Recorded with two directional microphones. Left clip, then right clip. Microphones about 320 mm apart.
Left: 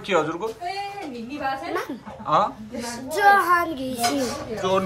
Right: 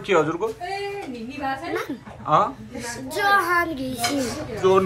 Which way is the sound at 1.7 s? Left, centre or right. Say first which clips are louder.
Even; centre.